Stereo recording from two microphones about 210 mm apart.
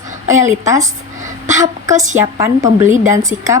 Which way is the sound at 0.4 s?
15° right (ahead or behind).